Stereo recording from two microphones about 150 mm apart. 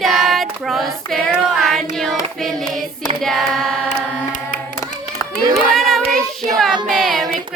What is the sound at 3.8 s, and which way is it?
Carnatic music, 60° left (ahead or behind).